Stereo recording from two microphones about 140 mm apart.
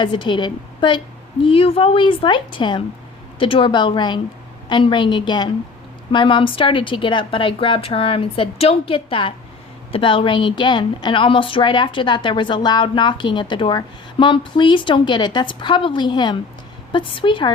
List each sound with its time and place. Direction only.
0.0 s a woman's voice: 35° left (ahead or behind)